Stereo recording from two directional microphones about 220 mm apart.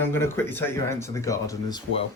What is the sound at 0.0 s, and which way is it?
Speech, 10° left (ahead or behind).